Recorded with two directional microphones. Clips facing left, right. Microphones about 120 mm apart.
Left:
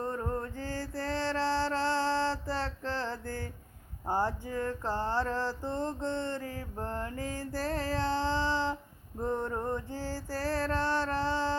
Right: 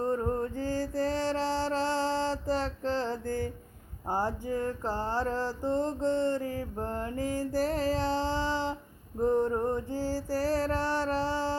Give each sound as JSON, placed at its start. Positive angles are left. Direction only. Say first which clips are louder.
{"t": 0.0, "sound": "mantra", "louder": "right 5 dB", "side_deg": -20}
{"t": 7.2, "sound": "a sound", "louder": "right 6 dB", "side_deg": -15}
{"t": 9.2, "sound": "music", "louder": "right 6 dB", "side_deg": -15}